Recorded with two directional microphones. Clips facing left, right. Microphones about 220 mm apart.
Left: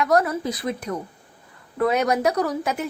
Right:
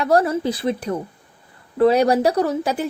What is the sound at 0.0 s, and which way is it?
A woman's voice, 30° right (ahead or behind).